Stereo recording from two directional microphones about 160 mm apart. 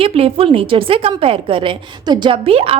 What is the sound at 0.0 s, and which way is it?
A woman's voice, 35° right (ahead or behind).